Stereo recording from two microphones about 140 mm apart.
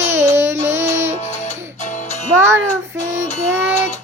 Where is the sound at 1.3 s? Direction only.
55° left (ahead or behind).